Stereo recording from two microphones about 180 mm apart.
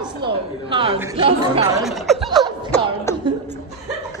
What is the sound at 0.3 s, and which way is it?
A woman's voice, 30° right (ahead or behind).